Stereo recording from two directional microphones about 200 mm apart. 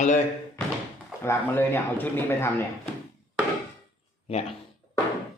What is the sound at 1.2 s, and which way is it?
Speech, 10° left (ahead or behind).